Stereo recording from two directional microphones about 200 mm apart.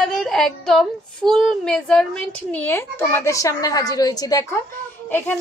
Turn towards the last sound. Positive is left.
turn(degrees=10)  # may be behind; listen again after turning